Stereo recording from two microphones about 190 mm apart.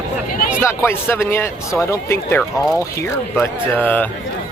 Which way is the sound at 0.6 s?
10° left (ahead or behind).